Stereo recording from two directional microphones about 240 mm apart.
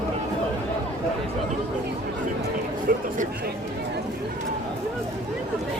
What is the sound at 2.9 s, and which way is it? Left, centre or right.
Chatter, right.